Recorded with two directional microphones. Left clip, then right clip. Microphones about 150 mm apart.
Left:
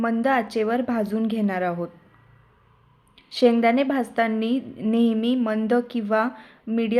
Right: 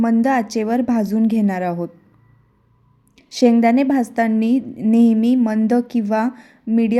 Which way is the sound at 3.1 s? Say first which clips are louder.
Right 3 dB; 40° right (ahead or behind).